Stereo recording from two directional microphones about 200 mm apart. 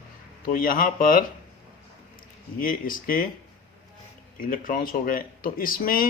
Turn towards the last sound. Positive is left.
turn(degrees=45)  # may be behind; listen again after turning